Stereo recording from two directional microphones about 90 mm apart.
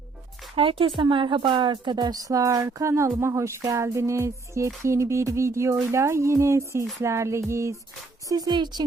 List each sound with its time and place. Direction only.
0.5 s speech: 80° right; by 3.1 s 35° right (ahead or behind)
3.2 s music: 30° right (ahead or behind)
8.3 s speech: 50° right (ahead or behind)